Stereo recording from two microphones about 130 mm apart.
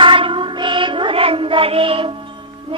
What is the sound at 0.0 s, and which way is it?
Music, 40° right (ahead or behind).